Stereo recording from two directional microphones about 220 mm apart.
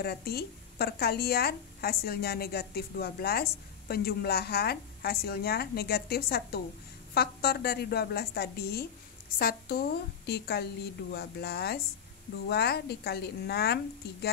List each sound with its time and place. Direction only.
0.0 s a woman's voice: 45° left (ahead or behind)